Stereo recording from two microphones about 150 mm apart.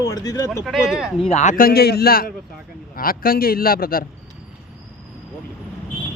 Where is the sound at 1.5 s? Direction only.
85° left.